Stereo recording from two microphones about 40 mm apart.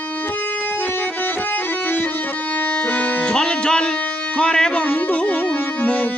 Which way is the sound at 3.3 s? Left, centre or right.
Left.